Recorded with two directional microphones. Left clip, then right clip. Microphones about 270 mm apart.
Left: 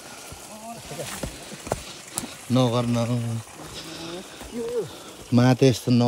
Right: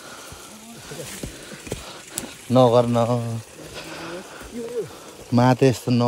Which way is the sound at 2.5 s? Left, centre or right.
Right.